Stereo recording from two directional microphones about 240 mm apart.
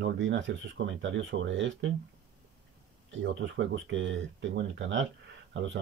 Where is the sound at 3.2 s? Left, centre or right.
Right.